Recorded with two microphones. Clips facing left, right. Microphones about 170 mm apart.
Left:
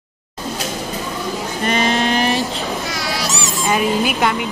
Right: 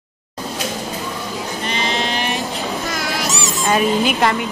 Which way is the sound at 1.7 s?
50° left (ahead or behind).